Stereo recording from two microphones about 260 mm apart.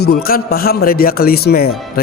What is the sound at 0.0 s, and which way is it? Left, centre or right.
Speech, left.